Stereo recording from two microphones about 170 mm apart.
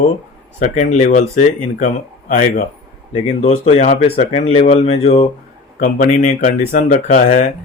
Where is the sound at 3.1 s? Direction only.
40° left (ahead or behind).